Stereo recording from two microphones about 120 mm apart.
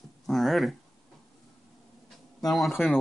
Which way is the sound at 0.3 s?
Centre (ahead or behind).